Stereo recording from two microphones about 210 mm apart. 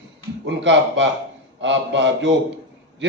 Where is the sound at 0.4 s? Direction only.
60° right (ahead or behind).